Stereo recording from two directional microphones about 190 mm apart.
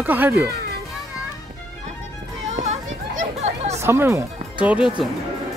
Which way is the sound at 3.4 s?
35° right (ahead or behind).